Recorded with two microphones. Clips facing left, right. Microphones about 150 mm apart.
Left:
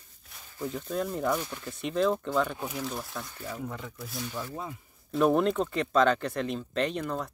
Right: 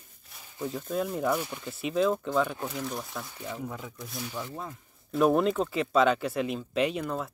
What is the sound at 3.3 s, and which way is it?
Speech, 20° right (ahead or behind).